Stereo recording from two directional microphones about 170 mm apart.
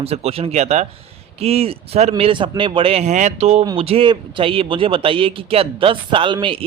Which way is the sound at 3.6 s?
30° right (ahead or behind).